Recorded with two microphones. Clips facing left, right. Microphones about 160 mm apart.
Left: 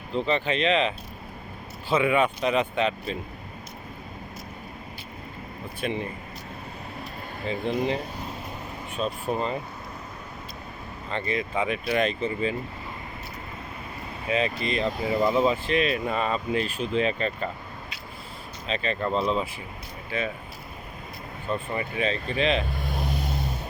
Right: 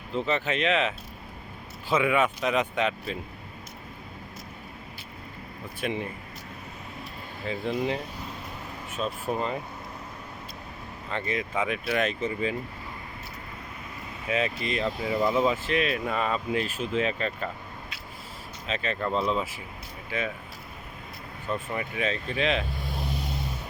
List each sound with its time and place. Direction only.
0.2 s speech: 5° right (ahead or behind)
5.8 s speech: 10° right (ahead or behind)
7.4 s speech: 5° right (ahead or behind)
9.0 s speech: 5° right (ahead or behind)
11.1 s speech: 10° right (ahead or behind)
14.3 s speech: 5° right (ahead or behind)
18.7 s speech: 5° right (ahead or behind)
20.1 s speech: 10° right (ahead or behind)
21.7 s speech: 5° right (ahead or behind)
22.7 s vehicle: 60° left (ahead or behind)